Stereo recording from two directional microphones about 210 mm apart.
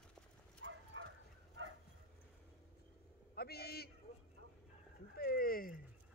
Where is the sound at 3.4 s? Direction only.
50° left (ahead or behind).